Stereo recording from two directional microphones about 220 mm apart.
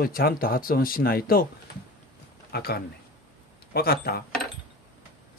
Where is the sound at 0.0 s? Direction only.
40° left (ahead or behind).